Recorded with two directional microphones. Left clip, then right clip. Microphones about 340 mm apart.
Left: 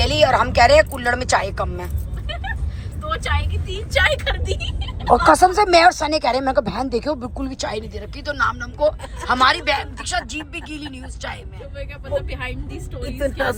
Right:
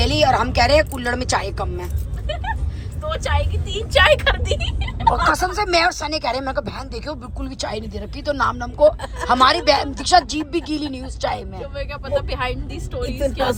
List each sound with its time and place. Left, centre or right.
0.0 s speech: centre
3.1 s a woman's voice: right
4.5 s speech: centre
12.0 s speech: centre